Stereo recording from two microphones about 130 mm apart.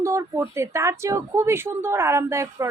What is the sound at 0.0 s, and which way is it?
Speech, 25° right (ahead or behind).